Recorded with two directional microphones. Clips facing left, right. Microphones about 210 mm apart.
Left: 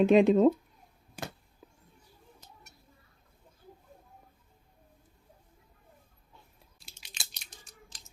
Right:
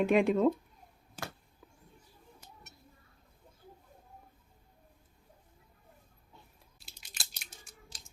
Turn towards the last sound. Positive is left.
turn(degrees=-5)  # may be behind; listen again after turning